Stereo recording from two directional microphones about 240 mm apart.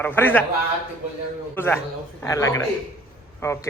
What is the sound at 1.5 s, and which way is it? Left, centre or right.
Speech, centre.